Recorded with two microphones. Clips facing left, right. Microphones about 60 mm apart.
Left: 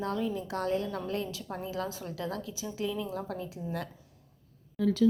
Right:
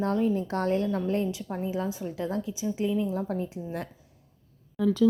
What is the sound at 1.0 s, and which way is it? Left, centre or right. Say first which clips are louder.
A woman's voice: right 6 dB; right.